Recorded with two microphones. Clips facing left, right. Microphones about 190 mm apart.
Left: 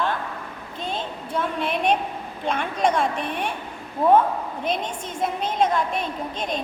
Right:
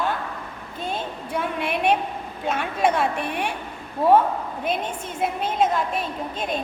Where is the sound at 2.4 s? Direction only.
5° right (ahead or behind).